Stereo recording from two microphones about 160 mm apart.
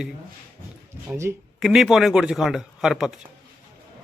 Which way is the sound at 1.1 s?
15° right (ahead or behind).